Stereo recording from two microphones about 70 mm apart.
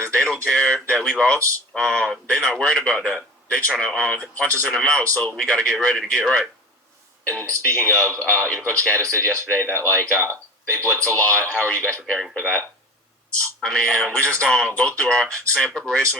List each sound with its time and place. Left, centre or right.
0.0 s a sound: centre
1.7 s speech: centre
7.3 s a man's voice: centre
12.1 s speech: centre
13.7 s a man's voice: centre